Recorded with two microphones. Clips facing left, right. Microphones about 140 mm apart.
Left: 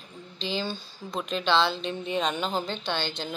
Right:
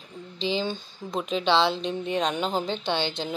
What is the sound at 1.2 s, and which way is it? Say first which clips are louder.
A woman's voice: right 2 dB; 5° right (ahead or behind).